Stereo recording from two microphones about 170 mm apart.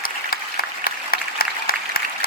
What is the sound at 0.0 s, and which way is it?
Applause, 60° left (ahead or behind).